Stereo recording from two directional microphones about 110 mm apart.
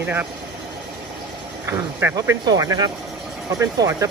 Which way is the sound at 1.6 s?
25° right (ahead or behind).